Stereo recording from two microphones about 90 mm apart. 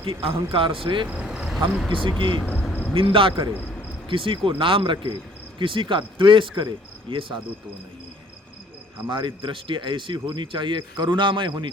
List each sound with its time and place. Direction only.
0.0 s a man's voice: 80° right
1.0 s vehicle: 15° right (ahead or behind)
1.9 s speech: 65° right (ahead or behind)
2.9 s speech: 80° right
5.5 s speech: 65° right (ahead or behind)
9.0 s speech: 65° right (ahead or behind)